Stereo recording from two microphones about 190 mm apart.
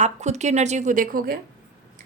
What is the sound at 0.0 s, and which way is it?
A woman's voice, 35° right (ahead or behind).